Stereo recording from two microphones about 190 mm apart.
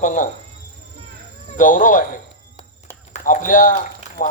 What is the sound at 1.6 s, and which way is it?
Speech, 45° left (ahead or behind).